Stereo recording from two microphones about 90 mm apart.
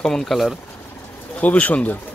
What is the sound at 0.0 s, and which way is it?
Speech, 5° left (ahead or behind).